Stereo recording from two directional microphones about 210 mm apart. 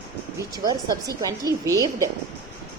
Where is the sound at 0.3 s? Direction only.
15° right (ahead or behind).